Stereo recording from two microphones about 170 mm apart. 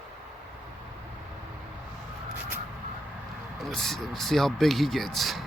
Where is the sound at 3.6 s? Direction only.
Centre (ahead or behind).